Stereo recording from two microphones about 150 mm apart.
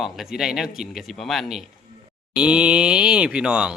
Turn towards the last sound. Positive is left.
turn(degrees=-5)  # may be behind; listen again after turning